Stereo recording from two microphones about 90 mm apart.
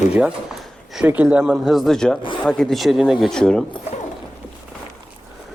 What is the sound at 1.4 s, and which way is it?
Speech, 5° right (ahead or behind).